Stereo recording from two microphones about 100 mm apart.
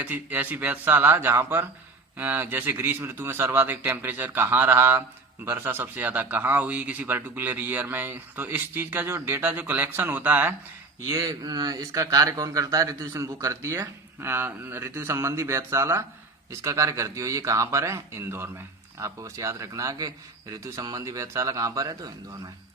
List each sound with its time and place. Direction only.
0.0 s speech: 15° right (ahead or behind)
11.1 s speech: 35° right (ahead or behind)